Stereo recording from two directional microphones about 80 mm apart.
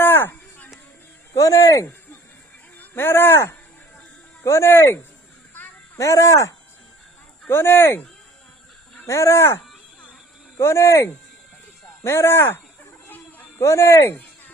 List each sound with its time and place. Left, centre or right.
0.0 s a sound: left
1.3 s a sound: left
2.7 s speech: left
6.0 s speech: left
7.4 s speech: left
9.0 s speech: left
10.6 s speech: left
13.6 s speech: left